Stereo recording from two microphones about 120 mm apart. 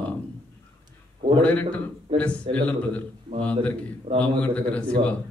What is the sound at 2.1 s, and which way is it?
Speech, 50° right (ahead or behind).